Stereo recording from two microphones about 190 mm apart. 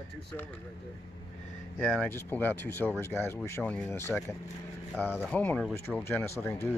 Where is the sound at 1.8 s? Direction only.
5° left (ahead or behind).